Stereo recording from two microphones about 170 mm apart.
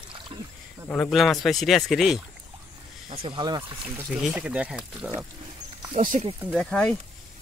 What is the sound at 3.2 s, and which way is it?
Speech, 25° right (ahead or behind).